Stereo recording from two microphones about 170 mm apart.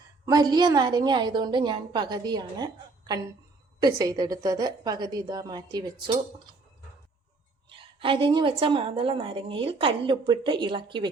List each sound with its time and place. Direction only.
0.3 s a woman's voice: 25° right (ahead or behind)
7.8 s a woman's voice: 30° right (ahead or behind)